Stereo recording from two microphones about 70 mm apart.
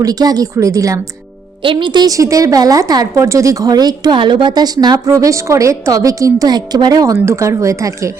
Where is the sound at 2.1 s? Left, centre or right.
Right.